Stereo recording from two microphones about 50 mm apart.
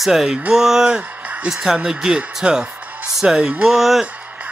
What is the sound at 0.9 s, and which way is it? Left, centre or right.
Music, right.